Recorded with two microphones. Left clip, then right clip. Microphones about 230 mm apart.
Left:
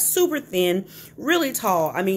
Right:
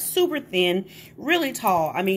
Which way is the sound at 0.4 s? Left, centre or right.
Centre.